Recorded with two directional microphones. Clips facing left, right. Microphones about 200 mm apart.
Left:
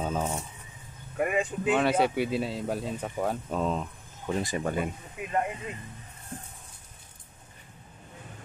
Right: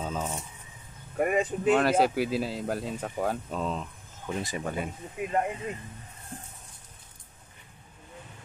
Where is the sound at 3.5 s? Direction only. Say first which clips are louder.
Left 3 dB; 50° left (ahead or behind).